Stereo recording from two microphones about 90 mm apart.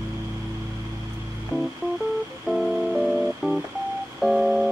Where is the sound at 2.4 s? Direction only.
Centre (ahead or behind).